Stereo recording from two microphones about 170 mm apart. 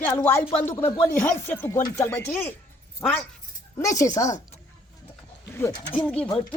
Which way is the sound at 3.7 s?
20° left (ahead or behind).